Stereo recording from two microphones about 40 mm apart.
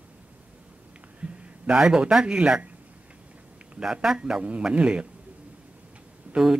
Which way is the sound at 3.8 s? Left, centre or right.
Centre.